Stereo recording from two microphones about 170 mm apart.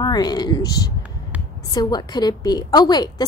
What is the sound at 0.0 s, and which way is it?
A woman's voice, 25° left (ahead or behind).